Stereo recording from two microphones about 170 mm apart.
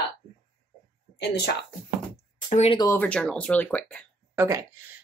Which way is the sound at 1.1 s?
80° left.